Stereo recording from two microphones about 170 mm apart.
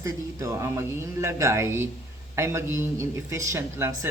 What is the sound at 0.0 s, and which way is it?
Speech, 20° right (ahead or behind).